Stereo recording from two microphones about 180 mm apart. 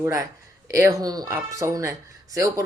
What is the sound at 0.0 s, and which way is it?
Speech, 15° right (ahead or behind).